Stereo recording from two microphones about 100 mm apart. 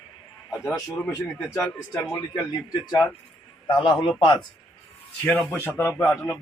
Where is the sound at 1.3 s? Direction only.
Centre (ahead or behind).